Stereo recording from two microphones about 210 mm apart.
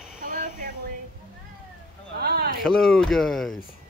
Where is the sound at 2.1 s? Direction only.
50° right (ahead or behind).